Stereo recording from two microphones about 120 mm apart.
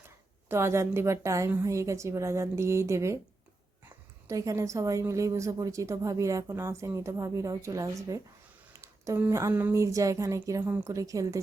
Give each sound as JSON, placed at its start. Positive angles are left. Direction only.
{"t": 0.4, "sound": "a woman's voice", "side_deg": -20}